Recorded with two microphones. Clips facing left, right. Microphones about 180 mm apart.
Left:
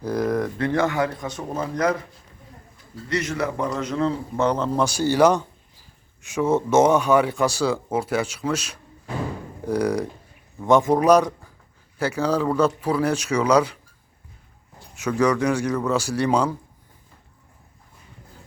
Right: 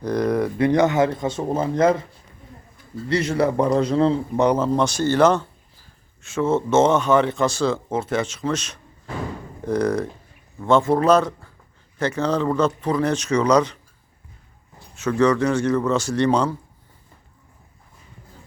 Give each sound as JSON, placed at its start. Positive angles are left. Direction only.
{"t": 0.0, "sound": "a sound", "side_deg": 5}
{"t": 0.6, "sound": "speech", "side_deg": -20}
{"t": 3.1, "sound": "a man's voice", "side_deg": -30}
{"t": 4.4, "sound": "speech", "side_deg": -15}
{"t": 4.6, "sound": "speech", "side_deg": 5}
{"t": 14.9, "sound": "speech", "side_deg": 10}